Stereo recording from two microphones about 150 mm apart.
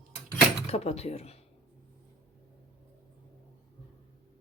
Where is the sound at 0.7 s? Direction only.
45° left (ahead or behind).